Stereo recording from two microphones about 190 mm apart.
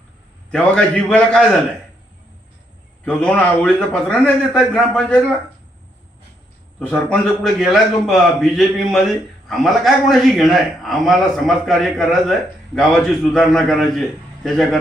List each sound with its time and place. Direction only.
0.5 s a man's voice: 5° left (ahead or behind)
3.0 s a man's voice: 5° left (ahead or behind)
6.7 s a man's voice: 5° left (ahead or behind)